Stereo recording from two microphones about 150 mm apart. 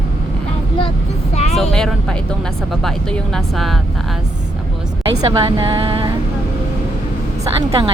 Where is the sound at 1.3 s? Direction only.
45° left (ahead or behind).